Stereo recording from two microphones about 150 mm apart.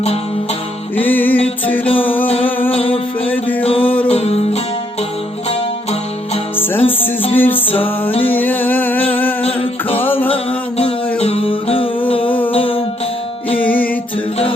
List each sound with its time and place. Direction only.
0.9 s music: 10° left (ahead or behind)
2.7 s music: 40° left (ahead or behind)
3.2 s music: 10° left (ahead or behind)
3.6 s music: 40° left (ahead or behind)
6.6 s music: 15° left (ahead or behind)
8.3 s a sound: 10° left (ahead or behind)
10.2 s music: 40° left (ahead or behind)